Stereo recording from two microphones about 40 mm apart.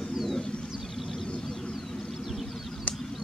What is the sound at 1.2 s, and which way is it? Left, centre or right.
Vehicle, left.